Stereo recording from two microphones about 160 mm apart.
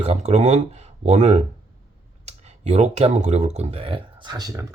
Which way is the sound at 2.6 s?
45° right (ahead or behind).